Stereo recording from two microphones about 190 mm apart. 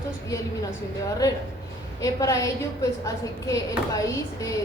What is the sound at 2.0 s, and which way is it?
A woman's voice, 15° left (ahead or behind).